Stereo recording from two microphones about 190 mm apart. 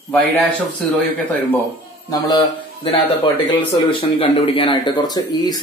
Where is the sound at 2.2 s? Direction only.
25° left (ahead or behind).